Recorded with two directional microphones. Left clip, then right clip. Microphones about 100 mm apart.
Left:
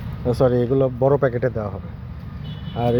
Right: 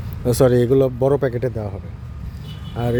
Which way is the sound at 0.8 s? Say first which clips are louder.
Even; 55° right (ahead or behind).